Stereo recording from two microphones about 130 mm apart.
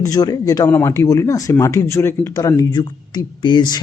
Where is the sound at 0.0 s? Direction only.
30° left (ahead or behind).